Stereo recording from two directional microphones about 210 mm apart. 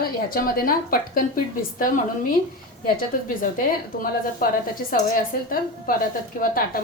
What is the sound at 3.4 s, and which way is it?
A woman's voice, 40° left (ahead or behind).